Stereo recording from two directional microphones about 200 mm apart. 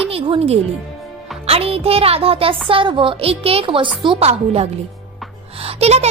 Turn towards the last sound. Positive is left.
turn(degrees=-30)  # may be behind; listen again after turning